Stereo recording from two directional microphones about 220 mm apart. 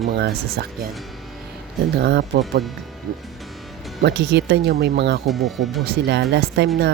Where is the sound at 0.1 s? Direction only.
45° right (ahead or behind).